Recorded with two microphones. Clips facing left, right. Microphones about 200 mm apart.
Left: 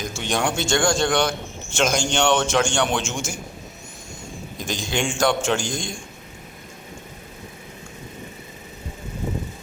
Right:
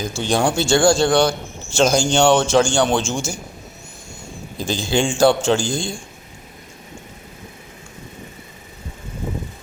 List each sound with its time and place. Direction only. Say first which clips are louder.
0.0 s a man's voice: right 5 dB; 30° right (ahead or behind)
4.5 s a man's voice: right 6 dB; 30° right (ahead or behind)